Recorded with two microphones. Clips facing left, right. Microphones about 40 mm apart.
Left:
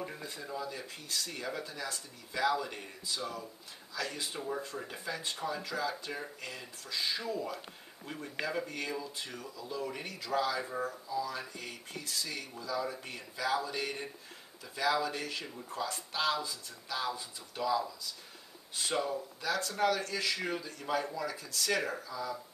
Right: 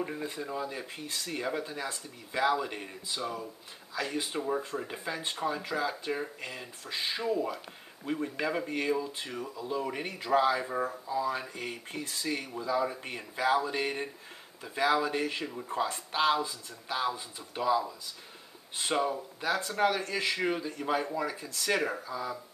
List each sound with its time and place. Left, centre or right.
0.2 s a man's voice: right